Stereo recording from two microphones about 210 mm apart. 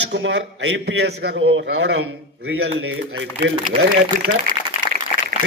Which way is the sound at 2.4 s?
75° right (ahead or behind).